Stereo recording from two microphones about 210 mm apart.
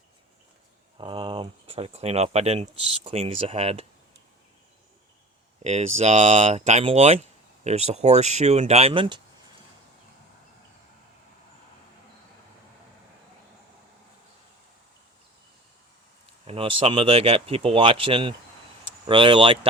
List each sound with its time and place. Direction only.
0.9 s speech: 25° right (ahead or behind)
5.6 s speech: 30° right (ahead or behind)
16.5 s speech: 25° right (ahead or behind)